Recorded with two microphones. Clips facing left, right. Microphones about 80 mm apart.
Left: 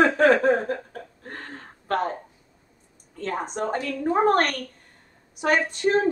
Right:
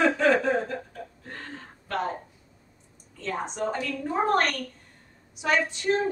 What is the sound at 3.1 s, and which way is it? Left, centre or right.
Speech, left.